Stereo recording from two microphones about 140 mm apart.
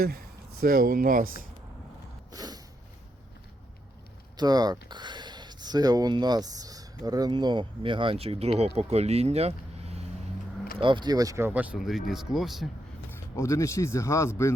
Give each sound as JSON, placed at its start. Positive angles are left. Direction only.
{"t": 0.6, "sound": "speech", "side_deg": -90}
{"t": 2.3, "sound": "a sound", "side_deg": -30}
{"t": 4.4, "sound": "speech", "side_deg": -30}
{"t": 10.8, "sound": "speech", "side_deg": -35}
{"t": 13.1, "sound": "speech", "side_deg": 20}